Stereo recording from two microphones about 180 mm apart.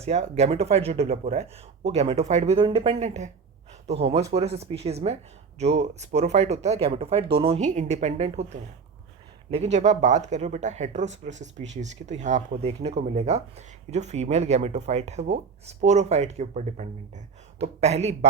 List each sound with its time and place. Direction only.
0.0 s speech: 35° right (ahead or behind)